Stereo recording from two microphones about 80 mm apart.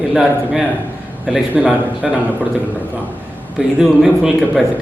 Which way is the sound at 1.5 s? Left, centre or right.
Centre.